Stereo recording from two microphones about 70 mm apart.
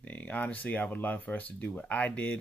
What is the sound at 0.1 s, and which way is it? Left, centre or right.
Speech, left.